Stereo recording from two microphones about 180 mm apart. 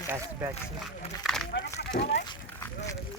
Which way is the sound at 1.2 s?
Centre (ahead or behind).